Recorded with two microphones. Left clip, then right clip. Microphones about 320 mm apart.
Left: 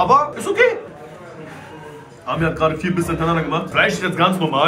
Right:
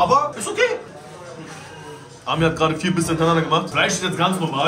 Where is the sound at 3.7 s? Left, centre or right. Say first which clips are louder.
Left 3 dB; centre.